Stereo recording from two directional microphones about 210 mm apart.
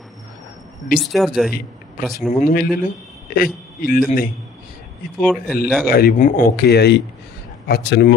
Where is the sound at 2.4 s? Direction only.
45° left (ahead or behind).